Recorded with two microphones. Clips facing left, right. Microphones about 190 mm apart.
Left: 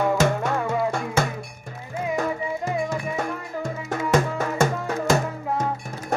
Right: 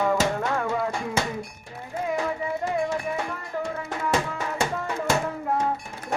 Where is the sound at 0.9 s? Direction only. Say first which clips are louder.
Left 3 dB; 50° left (ahead or behind).